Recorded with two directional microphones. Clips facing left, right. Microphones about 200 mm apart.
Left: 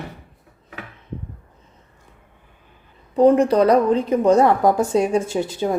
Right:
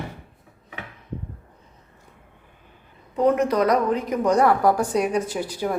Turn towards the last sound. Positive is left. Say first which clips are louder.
# left 4 dB
turn(degrees=25)  # may be behind; listen again after turning